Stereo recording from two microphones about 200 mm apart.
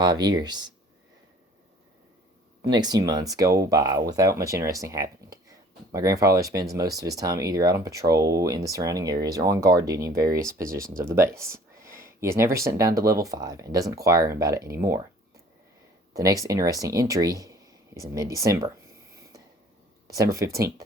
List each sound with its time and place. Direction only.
0.0 s speech: 20° right (ahead or behind)
2.6 s speech: 20° right (ahead or behind)
16.1 s speech: 15° right (ahead or behind)
20.1 s speech: 15° right (ahead or behind)